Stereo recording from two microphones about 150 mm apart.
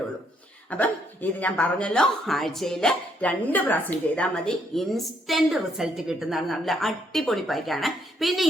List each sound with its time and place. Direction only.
0.7 s speech: 10° left (ahead or behind)